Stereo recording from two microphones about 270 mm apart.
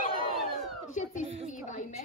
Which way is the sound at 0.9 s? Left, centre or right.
Left.